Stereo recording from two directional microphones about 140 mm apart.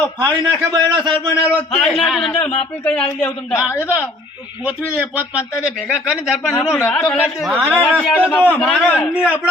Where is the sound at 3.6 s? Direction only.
20° left (ahead or behind).